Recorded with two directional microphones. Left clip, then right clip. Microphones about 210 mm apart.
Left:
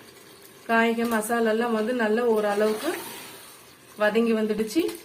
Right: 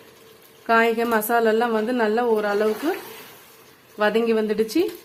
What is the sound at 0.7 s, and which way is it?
A woman's voice, 55° right (ahead or behind).